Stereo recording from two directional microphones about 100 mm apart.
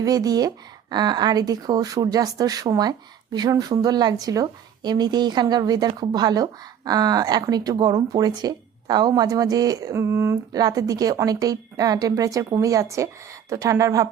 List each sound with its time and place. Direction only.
0.0 s a woman's voice: 40° right (ahead or behind)
10.5 s a woman's voice: 40° right (ahead or behind)